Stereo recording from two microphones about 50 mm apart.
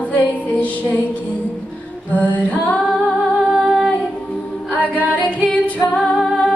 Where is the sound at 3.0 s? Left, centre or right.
Left.